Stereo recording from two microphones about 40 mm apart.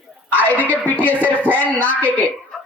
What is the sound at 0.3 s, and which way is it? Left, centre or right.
A woman's voice, left.